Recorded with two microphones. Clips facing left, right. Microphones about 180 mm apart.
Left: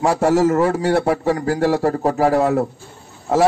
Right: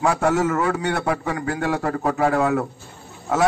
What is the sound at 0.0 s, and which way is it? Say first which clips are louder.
A man's voice: left 4 dB; 35° left (ahead or behind).